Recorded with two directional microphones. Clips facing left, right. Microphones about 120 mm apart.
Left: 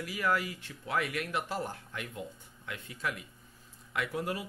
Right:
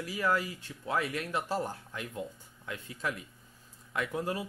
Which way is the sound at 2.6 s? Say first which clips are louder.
Right 1 dB; 35° right (ahead or behind).